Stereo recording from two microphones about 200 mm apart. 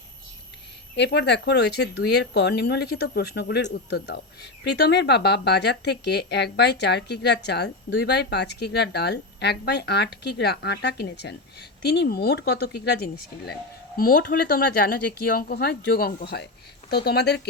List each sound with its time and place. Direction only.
0.9 s a woman's voice: 55° left (ahead or behind)